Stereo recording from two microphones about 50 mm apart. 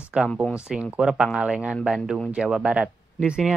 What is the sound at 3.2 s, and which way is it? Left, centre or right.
Speech, centre.